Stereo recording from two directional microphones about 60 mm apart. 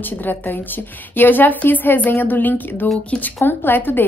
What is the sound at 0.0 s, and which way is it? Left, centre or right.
A woman's voice, left.